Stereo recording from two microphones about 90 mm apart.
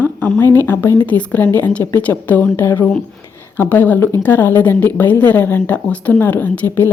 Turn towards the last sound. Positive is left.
turn(degrees=20)  # may be behind; listen again after turning